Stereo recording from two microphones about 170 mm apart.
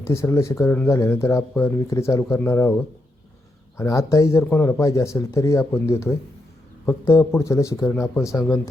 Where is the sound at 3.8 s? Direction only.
20° left (ahead or behind).